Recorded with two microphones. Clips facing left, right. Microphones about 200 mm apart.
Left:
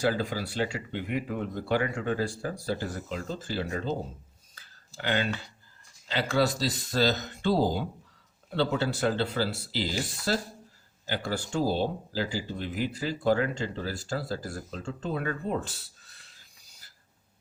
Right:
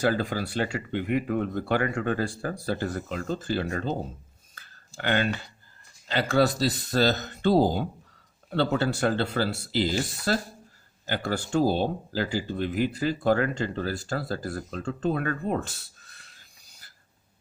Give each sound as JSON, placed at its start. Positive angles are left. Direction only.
{"t": 0.0, "sound": "speech", "side_deg": -55}
{"t": 4.5, "sound": "a sound", "side_deg": -55}
{"t": 4.9, "sound": "speech", "side_deg": -55}